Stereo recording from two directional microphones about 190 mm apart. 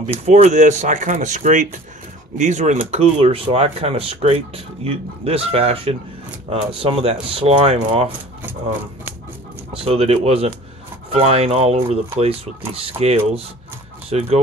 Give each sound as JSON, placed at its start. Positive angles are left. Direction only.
{"t": 0.2, "sound": "speech", "side_deg": -40}
{"t": 9.7, "sound": "speech", "side_deg": -30}